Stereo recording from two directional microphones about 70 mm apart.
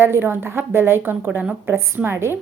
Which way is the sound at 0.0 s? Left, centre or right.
Right.